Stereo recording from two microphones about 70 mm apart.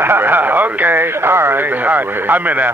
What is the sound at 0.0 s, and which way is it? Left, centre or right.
Speech, right.